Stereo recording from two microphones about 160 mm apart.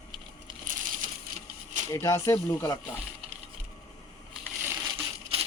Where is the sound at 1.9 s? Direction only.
20° left (ahead or behind).